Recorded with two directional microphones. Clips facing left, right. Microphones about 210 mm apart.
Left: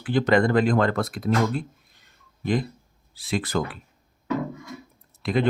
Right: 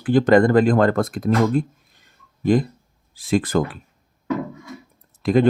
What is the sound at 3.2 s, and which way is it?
Speech, 50° right (ahead or behind).